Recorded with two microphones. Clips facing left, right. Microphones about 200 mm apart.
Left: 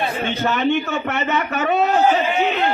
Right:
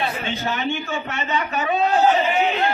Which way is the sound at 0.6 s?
65° left (ahead or behind).